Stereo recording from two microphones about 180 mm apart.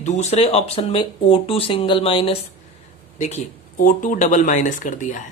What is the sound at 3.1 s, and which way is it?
Speech, 40° left (ahead or behind).